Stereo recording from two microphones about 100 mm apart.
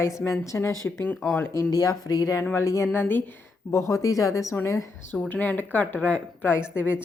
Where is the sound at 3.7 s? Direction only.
30° left (ahead or behind).